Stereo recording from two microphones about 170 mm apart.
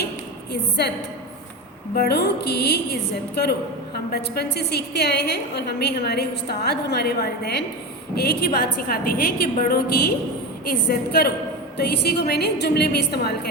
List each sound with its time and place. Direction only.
0.8 s a woman's voice: 70° left (ahead or behind)